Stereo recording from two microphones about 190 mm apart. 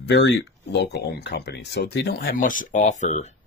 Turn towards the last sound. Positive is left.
turn(degrees=40)  # may be behind; listen again after turning